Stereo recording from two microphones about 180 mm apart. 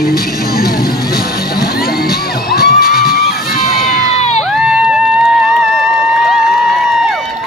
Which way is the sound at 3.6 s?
Centre (ahead or behind).